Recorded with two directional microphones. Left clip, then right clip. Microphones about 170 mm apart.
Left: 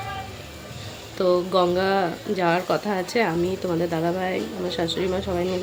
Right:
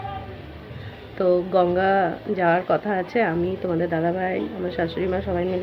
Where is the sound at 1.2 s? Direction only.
15° left (ahead or behind).